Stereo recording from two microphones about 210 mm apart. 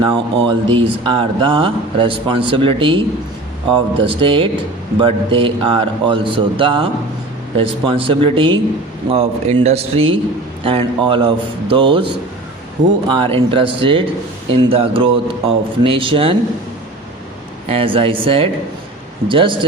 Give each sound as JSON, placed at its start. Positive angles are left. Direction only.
{"t": 0.0, "sound": "speech", "side_deg": -25}
{"t": 13.1, "sound": "speech", "side_deg": -25}
{"t": 17.7, "sound": "speech", "side_deg": -25}